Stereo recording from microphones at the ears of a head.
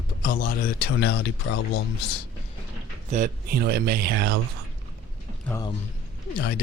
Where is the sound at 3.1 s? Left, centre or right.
Right.